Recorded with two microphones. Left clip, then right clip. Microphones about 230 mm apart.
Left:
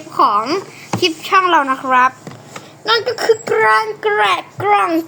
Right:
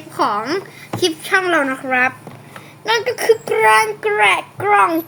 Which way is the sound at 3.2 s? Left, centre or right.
Centre.